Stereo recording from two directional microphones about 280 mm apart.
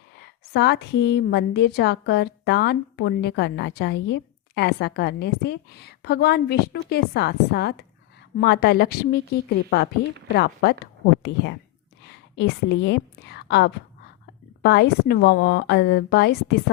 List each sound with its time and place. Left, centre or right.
0.2 s a woman's voice: left
12.4 s a woman's voice: left